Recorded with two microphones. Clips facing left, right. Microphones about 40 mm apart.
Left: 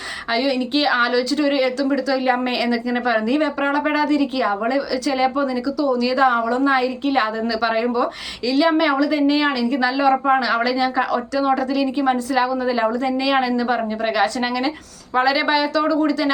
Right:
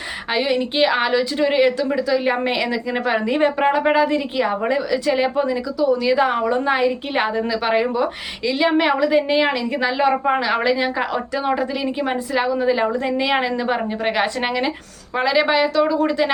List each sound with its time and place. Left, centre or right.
0.3 s a woman's voice: right
15.1 s a woman's voice: centre